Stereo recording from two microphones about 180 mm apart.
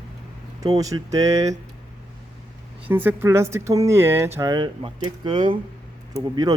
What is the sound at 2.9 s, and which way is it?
Speech, 10° right (ahead or behind).